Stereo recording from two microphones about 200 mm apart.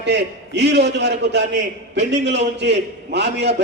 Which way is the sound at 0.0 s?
60° right (ahead or behind).